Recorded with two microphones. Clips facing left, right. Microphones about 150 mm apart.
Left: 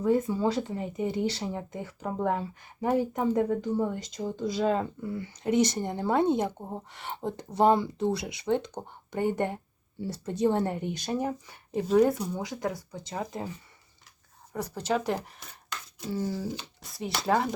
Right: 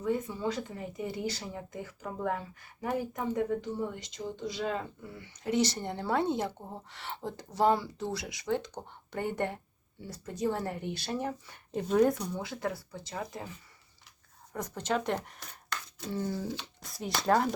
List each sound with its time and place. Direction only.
0.0 s speech: 40° left (ahead or behind)
3.3 s speech: 40° left (ahead or behind)
5.5 s speech: 20° left (ahead or behind)
10.0 s speech: 30° left (ahead or behind)
14.5 s speech: 10° left (ahead or behind)